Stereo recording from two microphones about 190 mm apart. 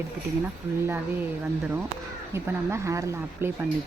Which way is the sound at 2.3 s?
15° right (ahead or behind).